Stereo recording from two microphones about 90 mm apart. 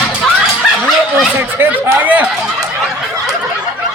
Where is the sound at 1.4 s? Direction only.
20° right (ahead or behind).